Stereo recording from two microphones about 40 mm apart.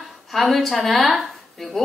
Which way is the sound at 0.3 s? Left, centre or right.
Centre.